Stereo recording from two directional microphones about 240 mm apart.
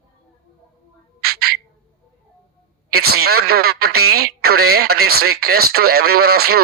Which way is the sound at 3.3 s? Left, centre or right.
Right.